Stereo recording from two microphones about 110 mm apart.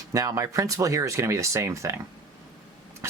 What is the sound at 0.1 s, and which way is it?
Speech, 30° right (ahead or behind).